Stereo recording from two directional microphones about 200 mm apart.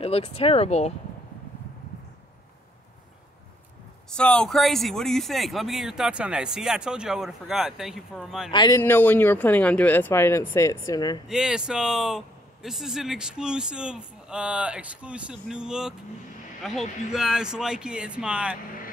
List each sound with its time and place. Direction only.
0.0 s speech: 30° left (ahead or behind)
4.1 s speech: 5° left (ahead or behind)
8.5 s speech: 20° left (ahead or behind)
11.2 s speech: 5° right (ahead or behind)